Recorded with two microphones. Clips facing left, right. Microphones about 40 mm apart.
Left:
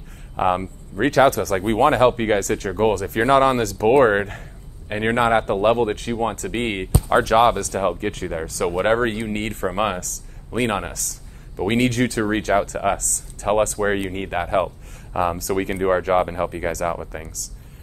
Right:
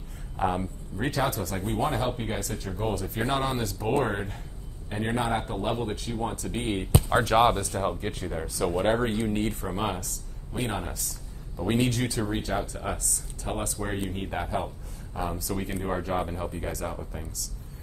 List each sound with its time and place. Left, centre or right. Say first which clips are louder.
0.4 s speech: left 7 dB; left
7.3 s speech: left 4 dB; left
8.6 s speech: left 6 dB; left